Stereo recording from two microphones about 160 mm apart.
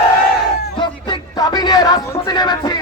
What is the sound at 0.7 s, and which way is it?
Speech, 30° left (ahead or behind).